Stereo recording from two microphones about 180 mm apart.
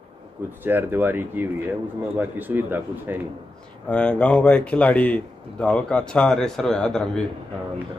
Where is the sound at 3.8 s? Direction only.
5° left (ahead or behind).